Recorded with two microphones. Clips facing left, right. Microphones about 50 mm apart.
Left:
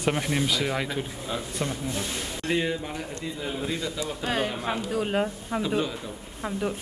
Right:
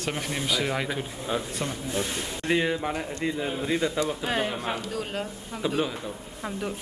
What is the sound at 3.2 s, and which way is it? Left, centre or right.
Speech, right.